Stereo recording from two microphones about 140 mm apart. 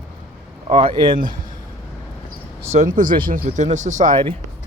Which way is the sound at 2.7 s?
60° right (ahead or behind).